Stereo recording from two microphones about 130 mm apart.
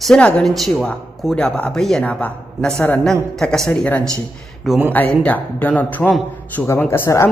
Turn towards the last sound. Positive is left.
turn(degrees=20)  # may be behind; listen again after turning